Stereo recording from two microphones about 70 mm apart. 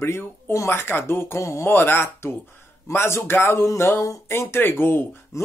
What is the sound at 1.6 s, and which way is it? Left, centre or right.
Speech, left.